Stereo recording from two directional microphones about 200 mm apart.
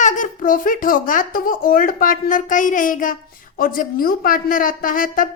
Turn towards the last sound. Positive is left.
turn(degrees=45)  # may be behind; listen again after turning